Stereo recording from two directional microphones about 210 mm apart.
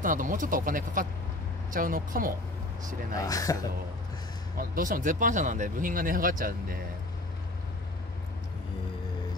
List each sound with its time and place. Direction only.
0.0 s speech: 40° right (ahead or behind)
3.2 s speech: 15° left (ahead or behind)
4.6 s speech: 40° right (ahead or behind)